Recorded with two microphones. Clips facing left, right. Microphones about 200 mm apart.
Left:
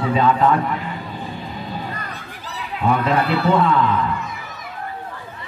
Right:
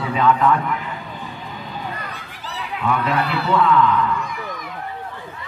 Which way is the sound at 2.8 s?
30° left (ahead or behind).